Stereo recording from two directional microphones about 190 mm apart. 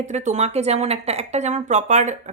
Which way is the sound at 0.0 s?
40° right (ahead or behind).